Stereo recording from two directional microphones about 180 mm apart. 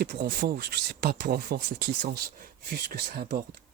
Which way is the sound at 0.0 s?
55° right (ahead or behind).